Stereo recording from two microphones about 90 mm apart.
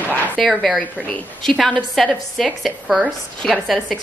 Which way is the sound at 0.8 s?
15° left (ahead or behind).